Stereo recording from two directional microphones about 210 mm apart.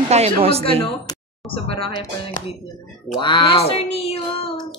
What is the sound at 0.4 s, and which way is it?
Speech, 30° right (ahead or behind).